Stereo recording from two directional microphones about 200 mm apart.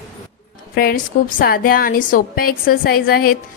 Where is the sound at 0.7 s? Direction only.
50° left (ahead or behind).